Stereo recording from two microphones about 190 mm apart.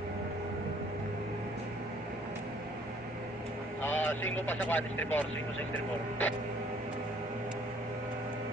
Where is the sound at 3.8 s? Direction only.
10° left (ahead or behind).